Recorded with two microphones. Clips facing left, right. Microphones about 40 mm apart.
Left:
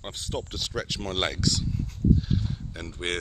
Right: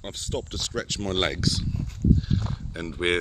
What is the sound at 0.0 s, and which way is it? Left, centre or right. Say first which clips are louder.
Speech: right 2 dB; centre.